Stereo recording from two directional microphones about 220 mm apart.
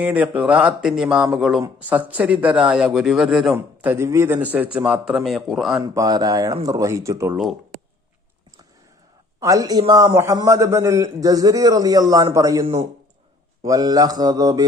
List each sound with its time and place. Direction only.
0.0 s a man's voice: 5° right (ahead or behind)
5.8 s a man's voice: 15° right (ahead or behind)
9.4 s a man's voice: 15° right (ahead or behind)